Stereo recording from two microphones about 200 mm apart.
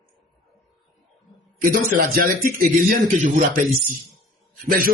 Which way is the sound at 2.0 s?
45° right (ahead or behind).